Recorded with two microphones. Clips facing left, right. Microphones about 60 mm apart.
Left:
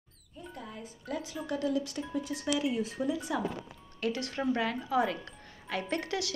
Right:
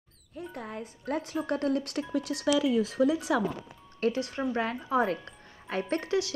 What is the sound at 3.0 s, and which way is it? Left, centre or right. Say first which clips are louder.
Speech: right 7 dB; right.